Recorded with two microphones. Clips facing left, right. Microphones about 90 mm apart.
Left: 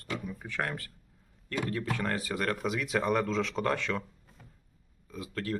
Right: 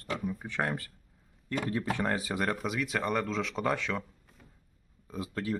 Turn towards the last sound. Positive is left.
turn(degrees=-10)  # may be behind; listen again after turning